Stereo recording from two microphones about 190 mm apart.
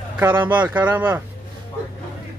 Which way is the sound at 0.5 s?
10° right (ahead or behind).